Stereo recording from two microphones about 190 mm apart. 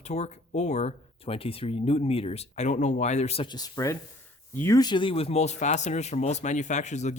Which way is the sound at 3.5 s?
20° left (ahead or behind).